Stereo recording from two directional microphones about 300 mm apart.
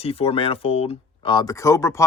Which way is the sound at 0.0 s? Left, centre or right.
Centre.